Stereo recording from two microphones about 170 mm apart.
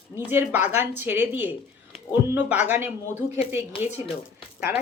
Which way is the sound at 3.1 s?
40° left (ahead or behind).